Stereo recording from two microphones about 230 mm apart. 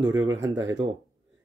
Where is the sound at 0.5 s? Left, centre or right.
Centre.